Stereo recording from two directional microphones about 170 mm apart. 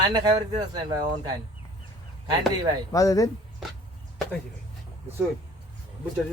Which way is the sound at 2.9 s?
20° left (ahead or behind).